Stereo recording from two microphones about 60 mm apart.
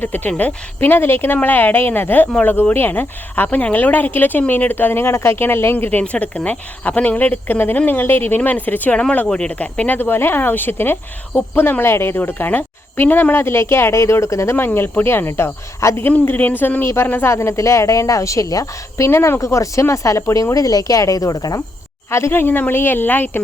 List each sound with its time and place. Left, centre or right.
0.0 s speech: left
13.3 s speech: left
14.5 s speech: left
16.0 s speech: left
16.8 s a woman's voice: left
19.4 s a woman's voice: left
20.3 s speech: left
22.1 s speech: left